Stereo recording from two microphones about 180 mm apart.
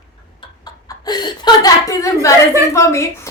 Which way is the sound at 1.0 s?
25° left (ahead or behind).